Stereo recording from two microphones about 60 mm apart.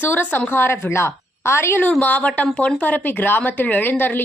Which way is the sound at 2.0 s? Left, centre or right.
Left.